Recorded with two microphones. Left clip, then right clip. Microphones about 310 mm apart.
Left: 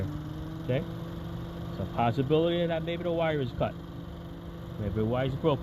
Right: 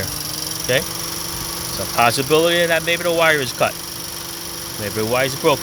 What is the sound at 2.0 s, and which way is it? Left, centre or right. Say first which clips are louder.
Speech: right 11 dB; centre.